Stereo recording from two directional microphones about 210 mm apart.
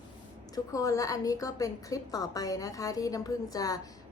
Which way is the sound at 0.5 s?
15° left (ahead or behind).